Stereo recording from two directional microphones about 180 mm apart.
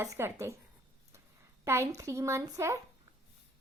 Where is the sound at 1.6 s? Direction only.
15° right (ahead or behind).